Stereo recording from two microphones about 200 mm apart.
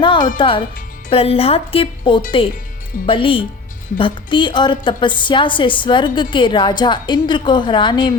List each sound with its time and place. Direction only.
0.0 s music: 25° left (ahead or behind)
0.3 s a woman's voice: 25° left (ahead or behind)